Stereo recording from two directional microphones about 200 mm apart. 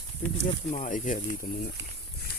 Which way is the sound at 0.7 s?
40° left (ahead or behind).